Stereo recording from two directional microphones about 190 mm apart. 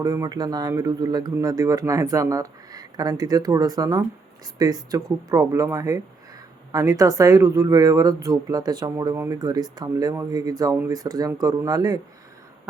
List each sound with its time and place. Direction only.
0.0 s speech: 20° right (ahead or behind)